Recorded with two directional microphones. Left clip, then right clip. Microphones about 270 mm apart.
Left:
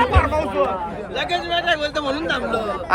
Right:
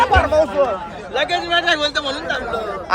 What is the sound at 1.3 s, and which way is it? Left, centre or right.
Speech, right.